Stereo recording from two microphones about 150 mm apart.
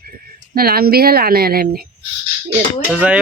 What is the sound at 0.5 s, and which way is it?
A woman's voice, 90° right.